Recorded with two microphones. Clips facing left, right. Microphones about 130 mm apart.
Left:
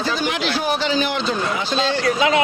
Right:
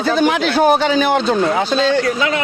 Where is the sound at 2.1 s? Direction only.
20° left (ahead or behind).